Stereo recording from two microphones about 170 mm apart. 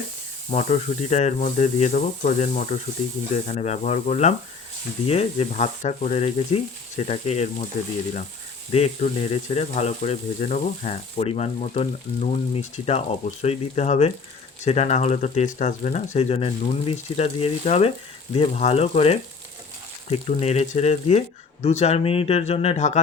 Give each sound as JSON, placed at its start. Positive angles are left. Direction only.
{"t": 0.5, "sound": "speech", "side_deg": 40}
{"t": 8.7, "sound": "speech", "side_deg": 35}